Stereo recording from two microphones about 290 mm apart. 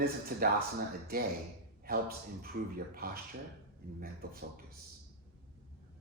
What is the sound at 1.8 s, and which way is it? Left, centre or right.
Speech, right.